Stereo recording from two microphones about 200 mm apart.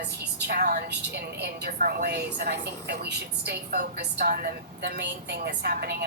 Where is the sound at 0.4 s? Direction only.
45° right (ahead or behind).